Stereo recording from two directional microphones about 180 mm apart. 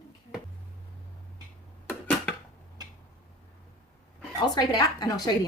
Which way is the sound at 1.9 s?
10° left (ahead or behind).